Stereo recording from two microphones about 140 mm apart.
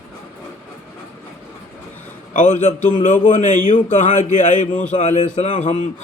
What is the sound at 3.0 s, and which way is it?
Speech, 70° left (ahead or behind).